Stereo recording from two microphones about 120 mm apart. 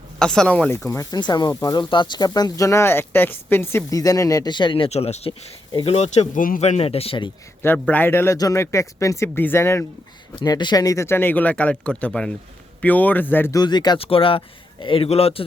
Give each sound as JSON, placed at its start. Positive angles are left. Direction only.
{"t": 0.2, "sound": "speech", "side_deg": 5}
{"t": 0.9, "sound": "speech", "side_deg": 30}
{"t": 4.9, "sound": "speech", "side_deg": 65}
{"t": 7.6, "sound": "speech", "side_deg": 15}
{"t": 10.4, "sound": "speech", "side_deg": 35}
{"t": 13.5, "sound": "speech", "side_deg": 35}
{"t": 14.0, "sound": "speech", "side_deg": 50}